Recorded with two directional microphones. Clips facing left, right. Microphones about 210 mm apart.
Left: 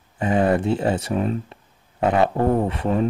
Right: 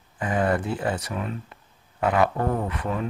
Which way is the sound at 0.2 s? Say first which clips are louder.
Left 5 dB; 25° left (ahead or behind).